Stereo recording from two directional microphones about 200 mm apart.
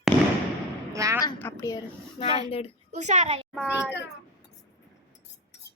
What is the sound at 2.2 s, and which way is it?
Speech, 30° left (ahead or behind).